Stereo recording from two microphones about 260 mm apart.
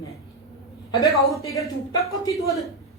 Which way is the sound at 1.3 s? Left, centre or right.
Centre.